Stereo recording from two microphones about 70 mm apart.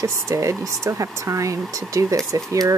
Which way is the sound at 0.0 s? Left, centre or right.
Right.